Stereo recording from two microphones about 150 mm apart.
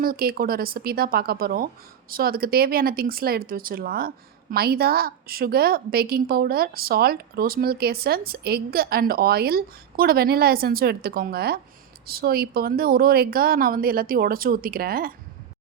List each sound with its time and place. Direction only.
0.0 s a woman's voice: 80° right